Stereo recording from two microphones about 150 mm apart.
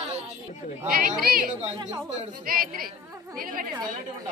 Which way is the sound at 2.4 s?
75° right (ahead or behind).